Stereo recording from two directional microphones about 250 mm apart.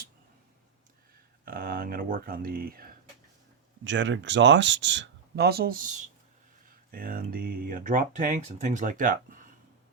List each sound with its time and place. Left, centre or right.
1.5 s speech: right